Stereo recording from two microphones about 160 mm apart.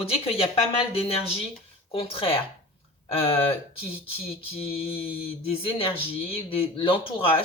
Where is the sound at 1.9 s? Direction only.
35° left (ahead or behind).